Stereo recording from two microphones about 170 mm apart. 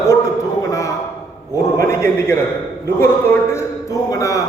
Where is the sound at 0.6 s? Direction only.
20° left (ahead or behind).